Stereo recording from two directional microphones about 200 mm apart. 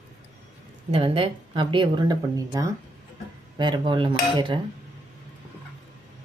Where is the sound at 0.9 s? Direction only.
25° right (ahead or behind).